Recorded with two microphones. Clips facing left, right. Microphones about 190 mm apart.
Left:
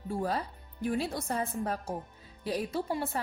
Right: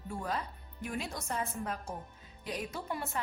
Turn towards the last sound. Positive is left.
turn(degrees=30)  # may be behind; listen again after turning